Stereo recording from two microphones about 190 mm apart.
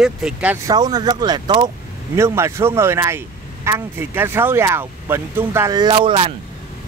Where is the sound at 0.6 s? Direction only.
20° right (ahead or behind).